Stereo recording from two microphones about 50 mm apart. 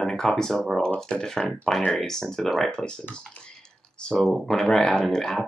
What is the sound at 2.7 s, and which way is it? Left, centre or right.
Speech, centre.